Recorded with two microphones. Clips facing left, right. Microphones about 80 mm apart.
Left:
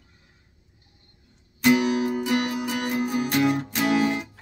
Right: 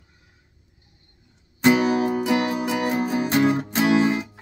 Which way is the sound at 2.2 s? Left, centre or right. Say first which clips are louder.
Right 3 dB; right.